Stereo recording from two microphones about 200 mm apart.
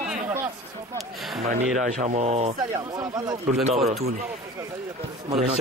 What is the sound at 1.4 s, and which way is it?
Speech, 35° right (ahead or behind).